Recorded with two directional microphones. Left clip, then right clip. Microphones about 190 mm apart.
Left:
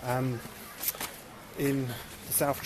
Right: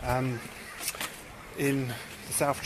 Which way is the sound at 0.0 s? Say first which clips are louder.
Right 2 dB; 10° right (ahead or behind).